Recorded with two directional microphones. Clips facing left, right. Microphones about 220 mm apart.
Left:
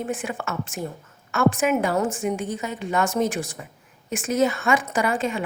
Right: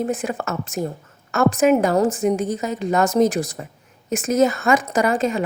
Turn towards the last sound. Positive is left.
turn(degrees=-40)  # may be behind; listen again after turning